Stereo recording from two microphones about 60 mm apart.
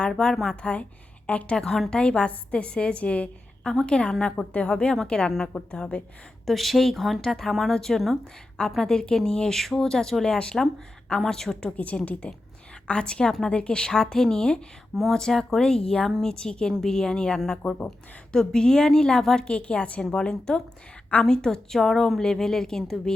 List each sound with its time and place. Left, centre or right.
0.1 s a woman's voice: centre
1.6 s speech: centre
1.9 s a woman's voice: centre
6.4 s a woman's voice: centre
11.8 s a woman's voice: left
14.9 s a woman's voice: centre